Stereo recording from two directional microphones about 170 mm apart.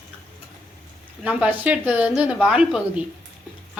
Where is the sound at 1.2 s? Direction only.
5° right (ahead or behind).